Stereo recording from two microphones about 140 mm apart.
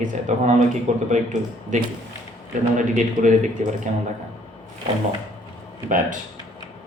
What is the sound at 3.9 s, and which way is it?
Speech, 55° right (ahead or behind).